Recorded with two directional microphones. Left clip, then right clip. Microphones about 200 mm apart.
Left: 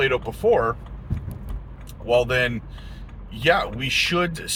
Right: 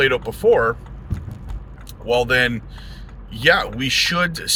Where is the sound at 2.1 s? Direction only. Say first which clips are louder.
Right 3 dB; 20° right (ahead or behind).